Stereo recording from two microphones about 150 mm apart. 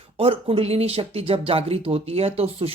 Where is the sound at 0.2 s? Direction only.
40° right (ahead or behind).